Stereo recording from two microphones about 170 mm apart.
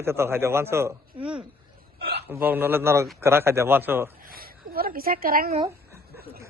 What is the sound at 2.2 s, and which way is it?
A man's voice, 10° right (ahead or behind).